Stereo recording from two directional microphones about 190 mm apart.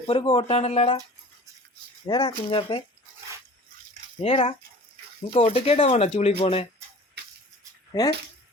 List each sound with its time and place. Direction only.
0.0 s speech: 25° left (ahead or behind)
2.0 s speech: 25° left (ahead or behind)
4.2 s speech: 30° left (ahead or behind)
7.9 s speech: 20° left (ahead or behind)